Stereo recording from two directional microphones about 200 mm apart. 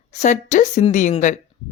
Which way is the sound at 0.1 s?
35° left (ahead or behind).